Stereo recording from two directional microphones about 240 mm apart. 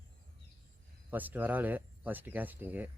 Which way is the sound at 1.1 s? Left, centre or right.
Centre.